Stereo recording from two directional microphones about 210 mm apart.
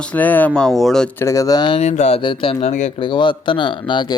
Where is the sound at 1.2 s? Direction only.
15° left (ahead or behind).